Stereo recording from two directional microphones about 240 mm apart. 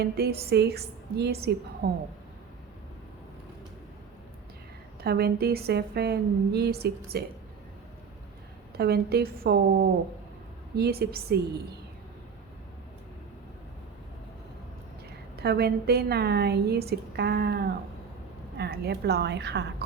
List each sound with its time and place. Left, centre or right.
0.0 s a woman's voice: right
5.0 s a woman's voice: right
8.8 s a woman's voice: right
10.8 s a woman's voice: right
15.4 s a woman's voice: right